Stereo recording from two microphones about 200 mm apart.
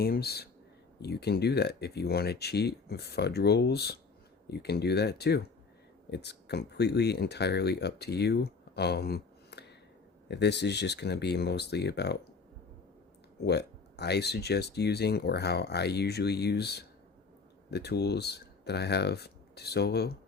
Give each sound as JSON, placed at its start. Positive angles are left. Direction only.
{"t": 0.0, "sound": "speech", "side_deg": 50}
{"t": 13.4, "sound": "speech", "side_deg": 55}